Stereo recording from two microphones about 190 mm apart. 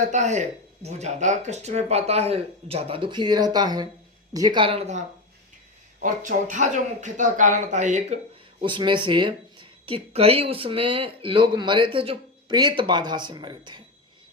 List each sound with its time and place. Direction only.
0.0 s speech: 40° right (ahead or behind)
8.6 s speech: 25° right (ahead or behind)